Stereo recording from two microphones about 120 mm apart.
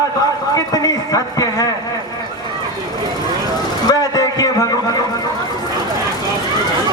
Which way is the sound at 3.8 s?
30° left (ahead or behind).